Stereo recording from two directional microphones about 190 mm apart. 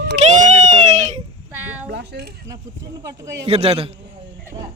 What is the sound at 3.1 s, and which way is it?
Speech, 20° right (ahead or behind).